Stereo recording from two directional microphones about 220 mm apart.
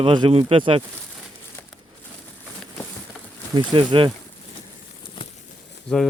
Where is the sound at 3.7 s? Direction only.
20° right (ahead or behind).